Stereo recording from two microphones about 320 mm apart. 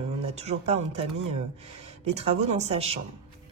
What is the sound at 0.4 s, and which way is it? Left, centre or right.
Speech, centre.